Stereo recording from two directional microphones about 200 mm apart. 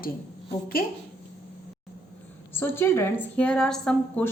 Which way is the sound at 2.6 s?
10° left (ahead or behind).